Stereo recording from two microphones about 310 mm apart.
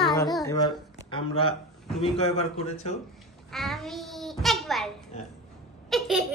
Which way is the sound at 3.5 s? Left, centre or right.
Centre.